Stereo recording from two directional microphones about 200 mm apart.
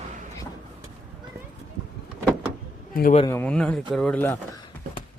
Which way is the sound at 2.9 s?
45° left (ahead or behind).